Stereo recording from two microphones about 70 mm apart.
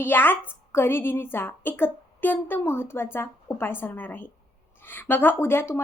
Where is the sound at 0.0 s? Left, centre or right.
Left.